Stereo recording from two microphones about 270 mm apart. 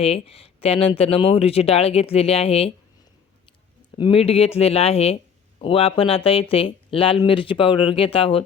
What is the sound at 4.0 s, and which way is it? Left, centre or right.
Speech, left.